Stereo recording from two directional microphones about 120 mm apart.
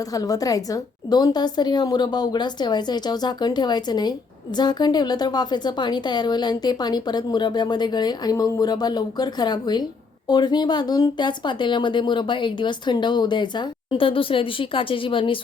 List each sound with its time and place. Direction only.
0.1 s a woman's voice: 30° left (ahead or behind)